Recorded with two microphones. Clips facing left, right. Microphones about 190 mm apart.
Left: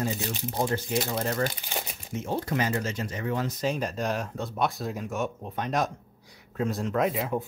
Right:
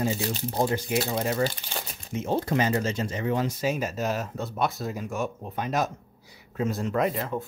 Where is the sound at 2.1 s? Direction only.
20° right (ahead or behind).